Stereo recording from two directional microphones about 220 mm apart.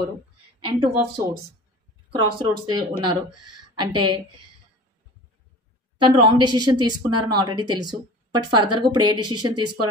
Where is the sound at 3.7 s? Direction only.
20° right (ahead or behind).